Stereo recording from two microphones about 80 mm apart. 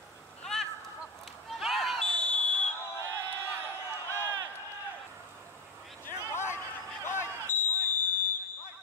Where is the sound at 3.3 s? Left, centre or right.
Right.